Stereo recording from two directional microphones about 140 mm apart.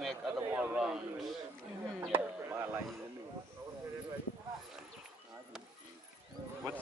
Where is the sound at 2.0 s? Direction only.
15° right (ahead or behind).